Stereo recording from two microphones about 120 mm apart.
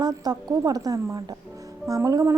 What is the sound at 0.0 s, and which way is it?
A woman's voice, 35° right (ahead or behind).